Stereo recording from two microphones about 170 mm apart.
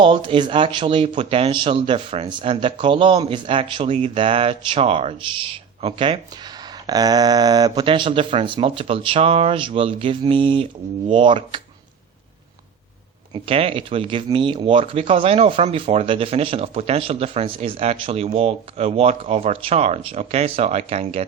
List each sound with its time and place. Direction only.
0.0 s speech: 30° right (ahead or behind)
13.3 s speech: 30° right (ahead or behind)